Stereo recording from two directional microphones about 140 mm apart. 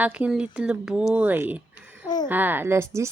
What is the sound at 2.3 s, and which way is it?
Speech, 15° right (ahead or behind).